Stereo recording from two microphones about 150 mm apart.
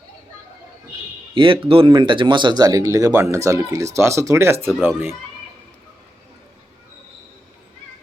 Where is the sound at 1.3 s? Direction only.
35° right (ahead or behind); by 5.2 s 15° right (ahead or behind).